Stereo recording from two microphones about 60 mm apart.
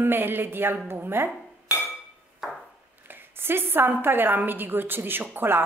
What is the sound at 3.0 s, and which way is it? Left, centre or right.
A woman's voice, right.